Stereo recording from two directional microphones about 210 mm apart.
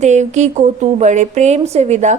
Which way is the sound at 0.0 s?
35° right (ahead or behind).